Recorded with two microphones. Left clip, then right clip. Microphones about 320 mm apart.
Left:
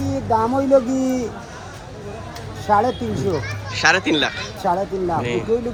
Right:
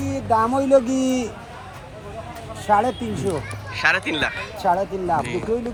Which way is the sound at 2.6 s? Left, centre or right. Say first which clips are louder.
Left 1 dB; right.